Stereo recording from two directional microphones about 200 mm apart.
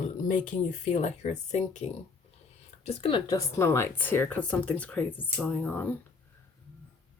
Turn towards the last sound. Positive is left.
turn(degrees=10)  # may be behind; listen again after turning